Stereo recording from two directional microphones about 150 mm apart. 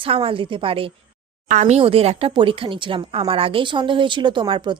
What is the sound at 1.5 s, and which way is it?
Speech, 50° right (ahead or behind).